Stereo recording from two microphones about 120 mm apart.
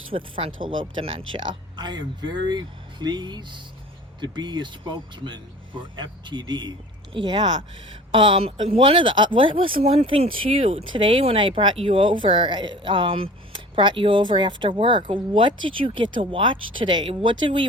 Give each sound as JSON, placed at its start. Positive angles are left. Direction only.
{"t": 0.1, "sound": "speech", "side_deg": -45}